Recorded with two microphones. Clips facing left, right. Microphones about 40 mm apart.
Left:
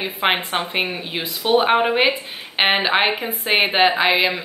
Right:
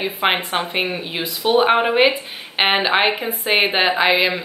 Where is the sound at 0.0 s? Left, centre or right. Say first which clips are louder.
Right 1 dB; centre.